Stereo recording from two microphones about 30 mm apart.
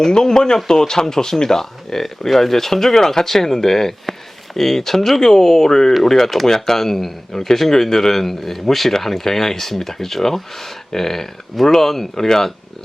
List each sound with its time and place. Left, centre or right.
0.0 s speech: left
5.2 s speech: centre